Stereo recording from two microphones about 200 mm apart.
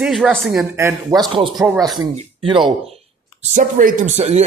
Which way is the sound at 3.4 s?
40° right (ahead or behind).